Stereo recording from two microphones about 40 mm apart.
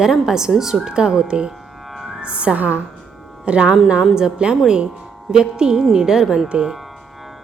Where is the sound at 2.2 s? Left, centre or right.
Right.